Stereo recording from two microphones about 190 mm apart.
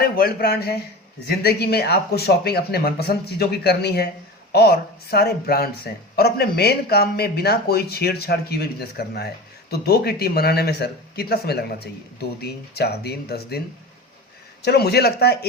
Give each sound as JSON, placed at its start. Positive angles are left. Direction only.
{"t": 0.0, "sound": "speech", "side_deg": 55}
{"t": 14.6, "sound": "speech", "side_deg": 60}